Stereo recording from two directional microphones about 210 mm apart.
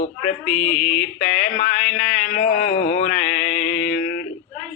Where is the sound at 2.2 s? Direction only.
40° left (ahead or behind).